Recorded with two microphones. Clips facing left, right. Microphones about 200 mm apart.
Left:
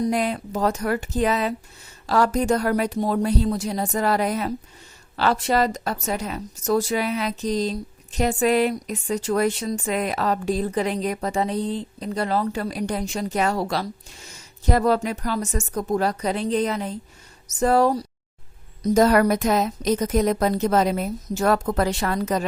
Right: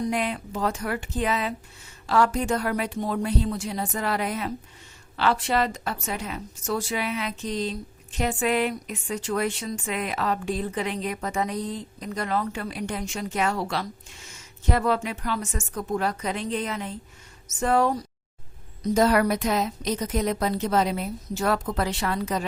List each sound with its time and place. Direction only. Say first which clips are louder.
0.0 s a woman's voice: left 4 dB; 40° left (ahead or behind)